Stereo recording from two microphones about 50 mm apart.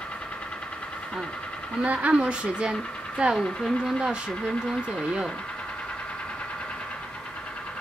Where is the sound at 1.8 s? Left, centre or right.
Right.